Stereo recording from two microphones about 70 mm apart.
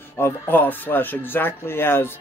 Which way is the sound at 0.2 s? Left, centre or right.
Left.